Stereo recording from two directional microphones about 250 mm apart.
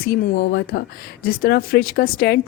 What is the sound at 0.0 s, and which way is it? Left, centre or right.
Speech, left.